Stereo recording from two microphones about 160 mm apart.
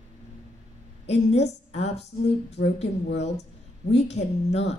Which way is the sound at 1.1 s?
45° left (ahead or behind).